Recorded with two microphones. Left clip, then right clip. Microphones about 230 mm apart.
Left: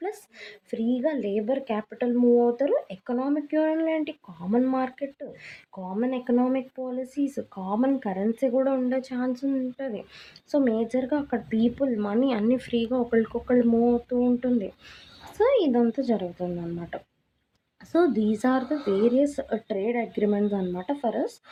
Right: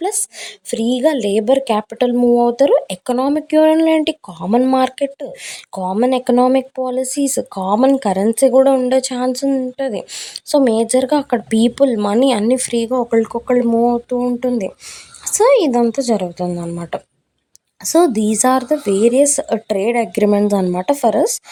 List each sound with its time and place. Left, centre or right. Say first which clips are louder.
0.0 s a woman's voice: right 12 dB; right